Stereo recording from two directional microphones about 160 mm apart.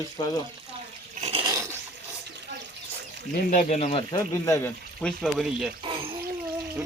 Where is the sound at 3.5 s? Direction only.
45° left (ahead or behind).